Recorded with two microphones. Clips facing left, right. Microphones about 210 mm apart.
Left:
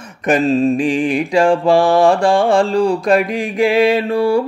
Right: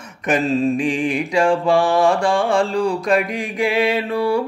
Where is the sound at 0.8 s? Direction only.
35° left (ahead or behind).